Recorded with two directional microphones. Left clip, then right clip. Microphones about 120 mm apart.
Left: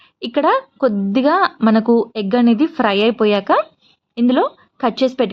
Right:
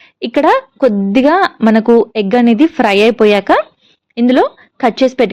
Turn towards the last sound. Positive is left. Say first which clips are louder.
# right 5 dB
turn(degrees=-30)  # may be behind; listen again after turning